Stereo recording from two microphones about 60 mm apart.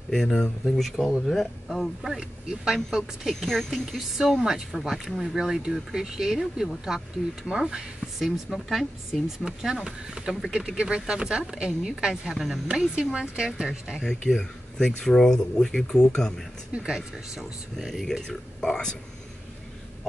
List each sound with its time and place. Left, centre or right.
0.1 s speech: centre
3.3 s speech: centre
14.0 s speech: centre
16.7 s speech: centre
17.7 s speech: centre